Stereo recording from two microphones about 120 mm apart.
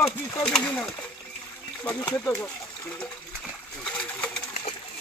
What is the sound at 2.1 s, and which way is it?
Speech, 20° left (ahead or behind).